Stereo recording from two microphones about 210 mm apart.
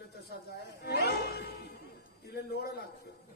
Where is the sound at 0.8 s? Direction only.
50° left (ahead or behind).